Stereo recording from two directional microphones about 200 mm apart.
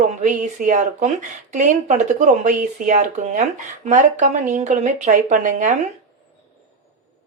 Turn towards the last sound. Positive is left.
turn(degrees=-40)  # may be behind; listen again after turning